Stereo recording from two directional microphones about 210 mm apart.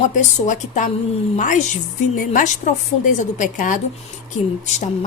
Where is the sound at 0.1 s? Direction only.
35° left (ahead or behind).